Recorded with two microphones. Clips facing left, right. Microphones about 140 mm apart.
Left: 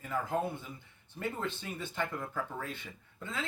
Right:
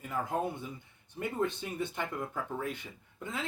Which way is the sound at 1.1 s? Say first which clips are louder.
Right 4 dB; 15° right (ahead or behind).